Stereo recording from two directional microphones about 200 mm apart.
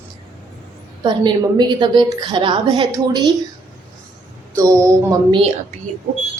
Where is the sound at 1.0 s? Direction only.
20° right (ahead or behind).